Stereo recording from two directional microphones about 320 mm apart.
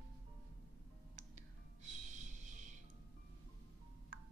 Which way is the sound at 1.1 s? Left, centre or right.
Right.